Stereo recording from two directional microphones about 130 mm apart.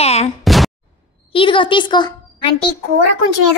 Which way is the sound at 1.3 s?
40° left (ahead or behind).